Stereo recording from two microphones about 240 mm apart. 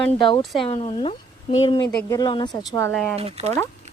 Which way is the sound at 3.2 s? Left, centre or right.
Right.